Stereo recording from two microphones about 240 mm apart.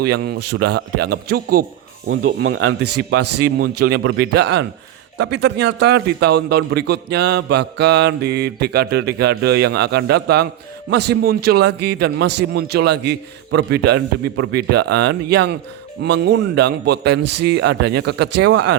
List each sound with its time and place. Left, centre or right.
0.0 s a man's voice: right
2.0 s speech: right
3.2 s speech: right
3.8 s a man's voice: right